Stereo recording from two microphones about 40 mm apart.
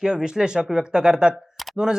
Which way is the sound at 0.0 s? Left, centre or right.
Centre.